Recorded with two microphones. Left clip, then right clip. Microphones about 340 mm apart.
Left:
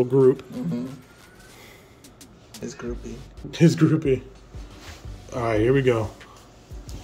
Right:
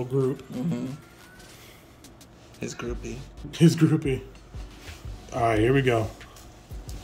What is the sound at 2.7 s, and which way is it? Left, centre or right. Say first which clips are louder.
Speech: left 1 dB; right.